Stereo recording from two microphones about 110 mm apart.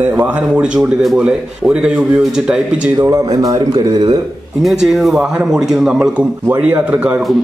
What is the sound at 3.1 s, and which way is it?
Speech, 30° right (ahead or behind).